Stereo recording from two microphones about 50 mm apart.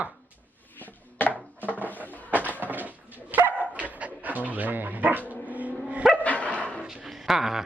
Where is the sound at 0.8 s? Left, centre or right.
Left.